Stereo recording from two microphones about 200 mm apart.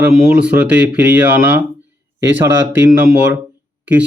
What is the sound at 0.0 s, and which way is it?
Speech, 5° right (ahead or behind).